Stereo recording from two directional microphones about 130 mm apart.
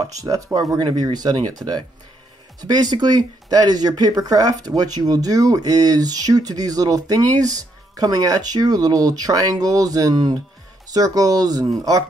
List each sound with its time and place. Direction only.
0.0 s speech: 25° right (ahead or behind)